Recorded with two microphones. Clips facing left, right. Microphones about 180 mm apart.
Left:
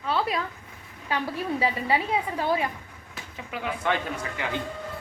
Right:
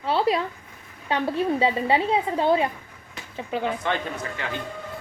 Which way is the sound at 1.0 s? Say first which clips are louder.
Right 5 dB; 25° right (ahead or behind).